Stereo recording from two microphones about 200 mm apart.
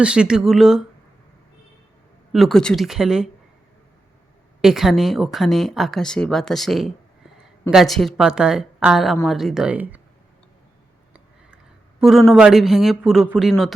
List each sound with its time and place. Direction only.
0.0 s speech: 5° right (ahead or behind)
2.3 s speech: centre (ahead or behind)
4.6 s speech: centre (ahead or behind)
11.1 s speech: 5° right (ahead or behind)